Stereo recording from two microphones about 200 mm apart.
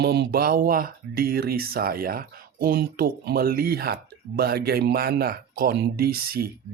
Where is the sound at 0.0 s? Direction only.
55° right (ahead or behind).